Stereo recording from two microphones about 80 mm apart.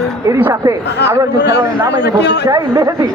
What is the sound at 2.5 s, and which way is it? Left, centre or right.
Speech, right.